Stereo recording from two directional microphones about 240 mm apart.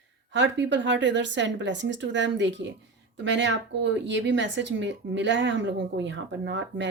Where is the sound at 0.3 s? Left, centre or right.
Right.